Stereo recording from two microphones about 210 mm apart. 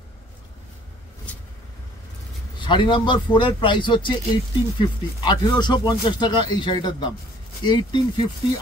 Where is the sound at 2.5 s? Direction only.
20° left (ahead or behind).